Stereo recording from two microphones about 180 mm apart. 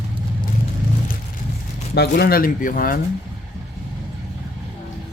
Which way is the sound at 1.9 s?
60° left (ahead or behind).